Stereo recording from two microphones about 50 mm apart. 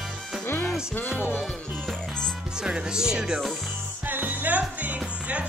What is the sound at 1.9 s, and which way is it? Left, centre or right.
Music, centre.